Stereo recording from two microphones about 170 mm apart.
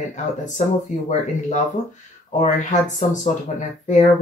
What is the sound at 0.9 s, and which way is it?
Speech, 45° left (ahead or behind).